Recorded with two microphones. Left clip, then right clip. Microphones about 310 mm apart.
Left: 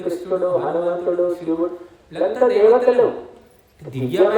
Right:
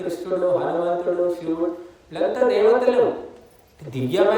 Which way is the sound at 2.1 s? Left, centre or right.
Centre.